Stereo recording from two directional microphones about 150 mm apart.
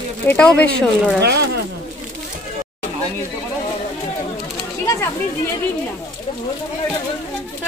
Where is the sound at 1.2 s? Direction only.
90° right.